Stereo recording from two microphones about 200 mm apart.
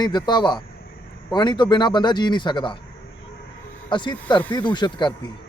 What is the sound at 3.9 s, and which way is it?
Speech, 25° left (ahead or behind).